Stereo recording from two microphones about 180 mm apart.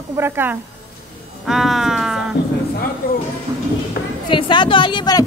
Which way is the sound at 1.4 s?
Centre (ahead or behind).